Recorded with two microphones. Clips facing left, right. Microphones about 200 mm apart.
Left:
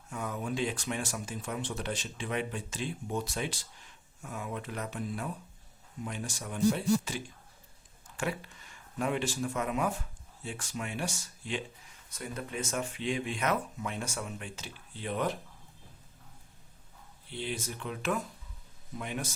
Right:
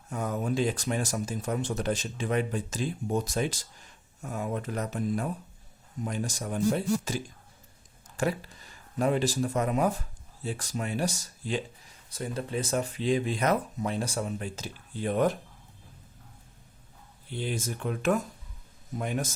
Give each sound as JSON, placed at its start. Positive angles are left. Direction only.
{"t": 0.1, "sound": "speech", "side_deg": -40}
{"t": 17.3, "sound": "speech", "side_deg": -45}